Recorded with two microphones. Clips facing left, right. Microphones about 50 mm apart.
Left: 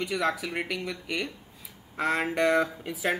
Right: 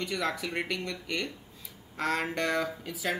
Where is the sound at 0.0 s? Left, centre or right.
Centre.